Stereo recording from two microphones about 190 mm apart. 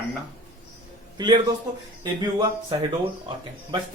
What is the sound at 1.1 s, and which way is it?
A man's voice, 25° right (ahead or behind).